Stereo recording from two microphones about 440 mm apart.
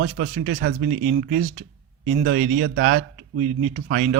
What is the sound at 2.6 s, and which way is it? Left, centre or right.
Speech, right.